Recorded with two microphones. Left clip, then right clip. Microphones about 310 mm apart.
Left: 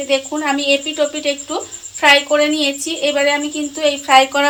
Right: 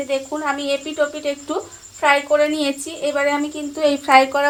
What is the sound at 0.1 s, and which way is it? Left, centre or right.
A woman's voice, right.